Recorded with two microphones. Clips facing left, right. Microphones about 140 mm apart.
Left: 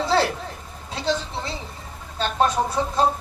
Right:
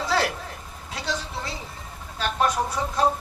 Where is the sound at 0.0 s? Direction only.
30° left (ahead or behind).